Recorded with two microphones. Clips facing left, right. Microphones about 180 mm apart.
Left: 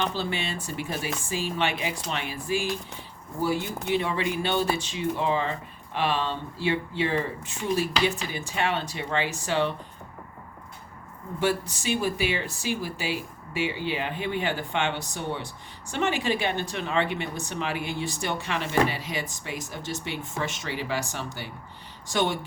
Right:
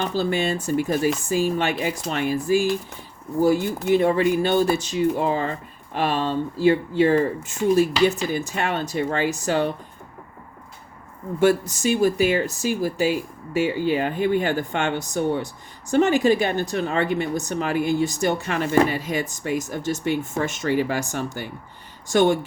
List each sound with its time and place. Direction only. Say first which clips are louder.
0.0 s speech: right 6 dB; 40° right (ahead or behind)
11.3 s speech: right 8 dB; 45° right (ahead or behind)